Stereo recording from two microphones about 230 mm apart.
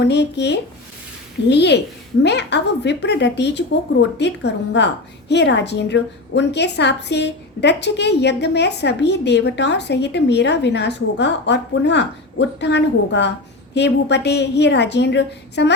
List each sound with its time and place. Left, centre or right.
0.0 s a woman's voice: left